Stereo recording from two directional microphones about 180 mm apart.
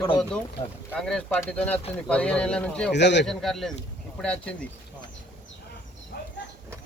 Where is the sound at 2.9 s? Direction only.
75° left (ahead or behind).